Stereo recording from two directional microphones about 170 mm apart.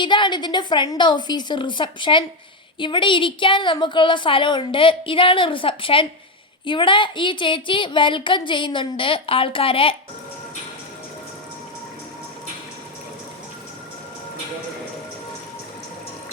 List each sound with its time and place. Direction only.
0.0 s a woman's voice: 25° left (ahead or behind)